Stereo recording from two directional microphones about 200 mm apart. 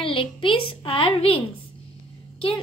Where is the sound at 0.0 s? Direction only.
25° left (ahead or behind).